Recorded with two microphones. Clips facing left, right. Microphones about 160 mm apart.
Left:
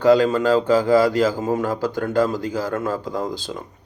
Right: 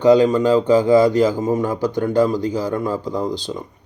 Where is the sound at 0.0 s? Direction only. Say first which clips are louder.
Right 3 dB; 20° right (ahead or behind).